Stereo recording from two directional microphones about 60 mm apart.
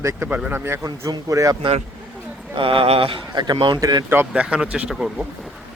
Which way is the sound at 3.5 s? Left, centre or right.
Right.